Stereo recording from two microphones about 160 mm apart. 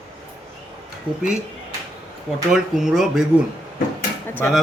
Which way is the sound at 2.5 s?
5° right (ahead or behind).